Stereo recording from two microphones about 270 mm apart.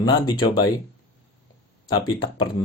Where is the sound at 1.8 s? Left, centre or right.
Centre.